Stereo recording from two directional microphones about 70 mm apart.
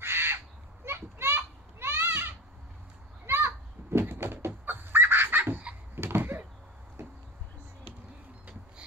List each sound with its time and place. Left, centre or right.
0.0 s crow: right
0.8 s children playing: right
4.5 s chicken: right
5.9 s door: right